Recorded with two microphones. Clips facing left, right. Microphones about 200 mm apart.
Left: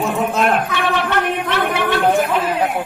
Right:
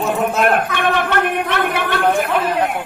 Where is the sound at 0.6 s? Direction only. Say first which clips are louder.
Right 1 dB; 55° right (ahead or behind).